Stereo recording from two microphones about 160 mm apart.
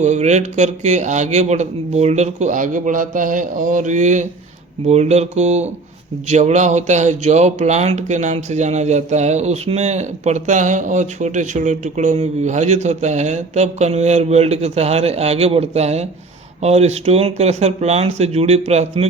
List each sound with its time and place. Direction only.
0.0 s speech: 45° right (ahead or behind)